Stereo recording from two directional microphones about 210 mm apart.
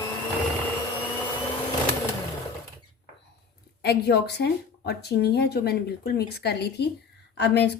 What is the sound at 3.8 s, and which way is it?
Speech, 50° left (ahead or behind).